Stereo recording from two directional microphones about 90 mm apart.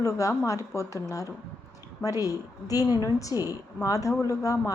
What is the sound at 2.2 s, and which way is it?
Speech, 40° left (ahead or behind).